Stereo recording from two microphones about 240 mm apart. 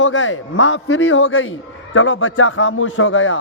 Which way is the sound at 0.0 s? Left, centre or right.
Left.